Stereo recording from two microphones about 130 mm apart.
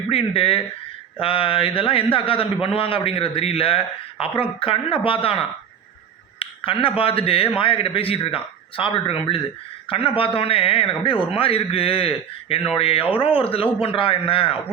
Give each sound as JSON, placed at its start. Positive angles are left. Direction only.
{"t": 0.1, "sound": "a man's voice", "side_deg": 45}